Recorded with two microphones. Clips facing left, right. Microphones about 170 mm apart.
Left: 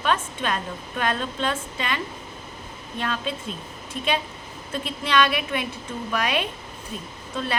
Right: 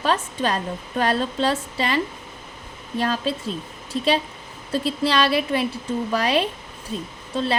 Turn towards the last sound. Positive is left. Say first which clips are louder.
# right 5 dB
turn(degrees=-30)  # may be behind; listen again after turning